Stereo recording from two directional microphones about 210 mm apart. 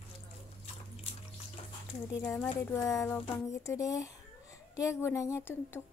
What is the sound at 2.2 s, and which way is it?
Speech, 10° left (ahead or behind).